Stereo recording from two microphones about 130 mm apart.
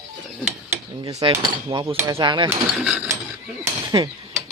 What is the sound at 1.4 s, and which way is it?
Speech, 30° right (ahead or behind).